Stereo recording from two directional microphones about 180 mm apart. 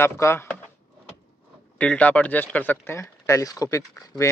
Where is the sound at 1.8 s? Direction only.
10° left (ahead or behind).